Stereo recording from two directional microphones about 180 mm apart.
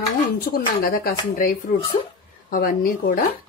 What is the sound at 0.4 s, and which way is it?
Speech, 55° left (ahead or behind).